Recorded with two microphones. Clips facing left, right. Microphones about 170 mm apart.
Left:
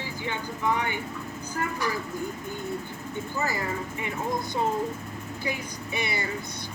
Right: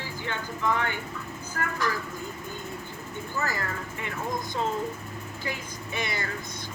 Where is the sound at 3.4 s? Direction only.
15° left (ahead or behind).